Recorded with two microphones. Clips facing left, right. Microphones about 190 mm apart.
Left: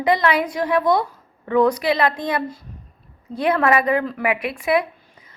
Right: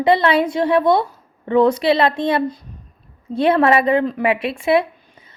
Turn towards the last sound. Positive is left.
turn(degrees=-25)  # may be behind; listen again after turning